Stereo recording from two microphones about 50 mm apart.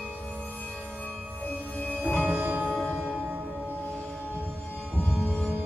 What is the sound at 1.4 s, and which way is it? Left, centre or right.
Music, left.